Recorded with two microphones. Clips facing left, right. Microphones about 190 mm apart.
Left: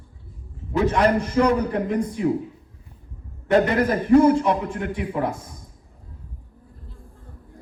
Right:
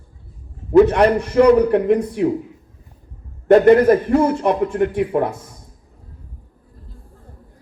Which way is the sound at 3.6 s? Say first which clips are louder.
Right 8 dB; 60° right (ahead or behind).